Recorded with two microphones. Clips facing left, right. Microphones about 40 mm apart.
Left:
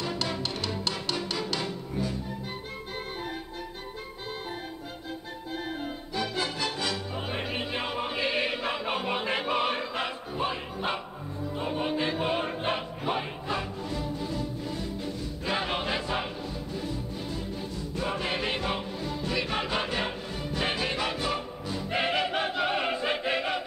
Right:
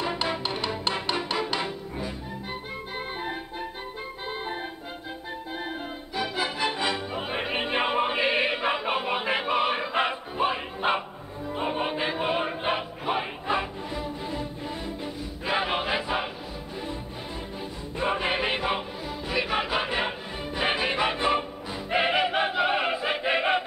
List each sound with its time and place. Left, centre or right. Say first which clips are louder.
0.0 s music: right 3 dB; right
5.5 s music: left 1 dB; centre
9.9 s music: right 5 dB; right
17.6 s music: right 2 dB; right